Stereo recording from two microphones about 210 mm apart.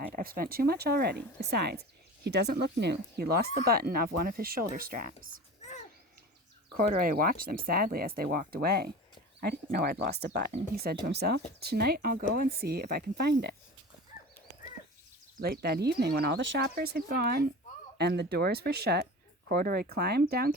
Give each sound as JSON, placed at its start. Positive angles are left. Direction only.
{"t": 0.1, "sound": "speech", "side_deg": -45}
{"t": 6.7, "sound": "speech", "side_deg": -45}
{"t": 15.4, "sound": "speech", "side_deg": -45}